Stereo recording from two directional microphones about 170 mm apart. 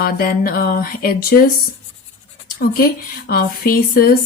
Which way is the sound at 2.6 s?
60° left (ahead or behind).